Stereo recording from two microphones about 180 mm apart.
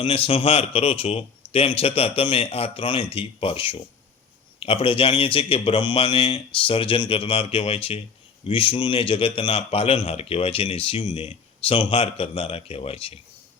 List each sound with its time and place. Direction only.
0.0 s a man's voice: 30° left (ahead or behind)